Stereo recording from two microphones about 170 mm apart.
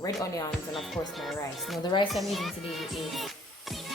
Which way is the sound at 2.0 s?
Centre (ahead or behind).